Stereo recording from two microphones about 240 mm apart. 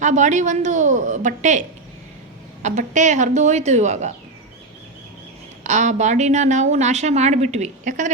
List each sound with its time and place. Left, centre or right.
0.0 s a woman's voice: right
5.6 s a woman's voice: right